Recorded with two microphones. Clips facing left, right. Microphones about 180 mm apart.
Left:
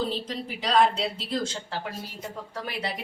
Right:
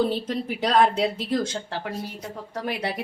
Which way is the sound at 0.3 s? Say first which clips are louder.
Right 5 dB; 55° right (ahead or behind).